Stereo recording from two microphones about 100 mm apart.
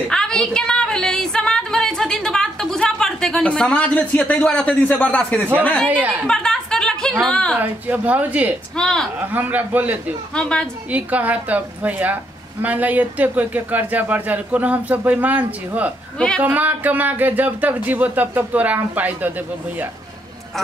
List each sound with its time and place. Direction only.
0.1 s a sound: 5° left (ahead or behind)
4.8 s speech: 15° left (ahead or behind)
5.9 s speech: 15° right (ahead or behind)
6.2 s chuckle: 5° left (ahead or behind)
7.5 s speech: 15° right (ahead or behind)
8.7 s speech: 5° left (ahead or behind)
9.2 s speech: 20° right (ahead or behind)
10.3 s speech: 10° left (ahead or behind)
10.9 s speech: 15° right (ahead or behind)